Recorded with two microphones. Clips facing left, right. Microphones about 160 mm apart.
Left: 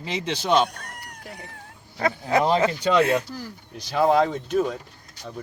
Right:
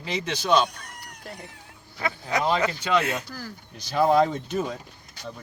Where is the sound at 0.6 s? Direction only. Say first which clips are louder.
Left 1 dB; 55° left (ahead or behind).